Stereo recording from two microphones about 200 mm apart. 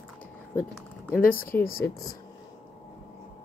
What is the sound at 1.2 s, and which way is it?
Speech, 45° left (ahead or behind).